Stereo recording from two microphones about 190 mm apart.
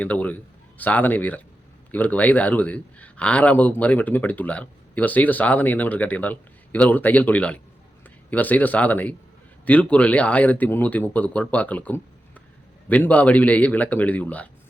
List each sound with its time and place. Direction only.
0.0 s a man's voice: 10° left (ahead or behind)